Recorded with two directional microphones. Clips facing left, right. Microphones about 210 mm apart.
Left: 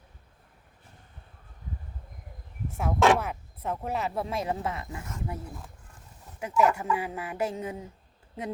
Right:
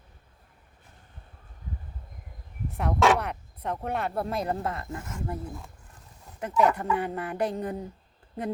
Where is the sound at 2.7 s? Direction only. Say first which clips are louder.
Even; 5° left (ahead or behind).